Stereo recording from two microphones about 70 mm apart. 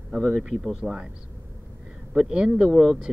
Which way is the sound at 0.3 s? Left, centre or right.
Centre.